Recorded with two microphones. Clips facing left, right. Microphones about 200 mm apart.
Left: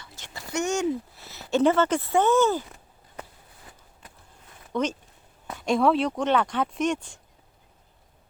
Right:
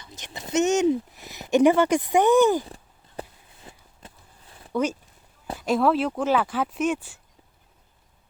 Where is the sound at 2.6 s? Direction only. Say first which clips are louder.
Right 5 dB; 30° right (ahead or behind).